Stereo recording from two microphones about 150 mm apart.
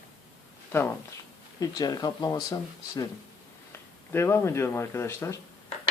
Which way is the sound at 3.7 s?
15° left (ahead or behind).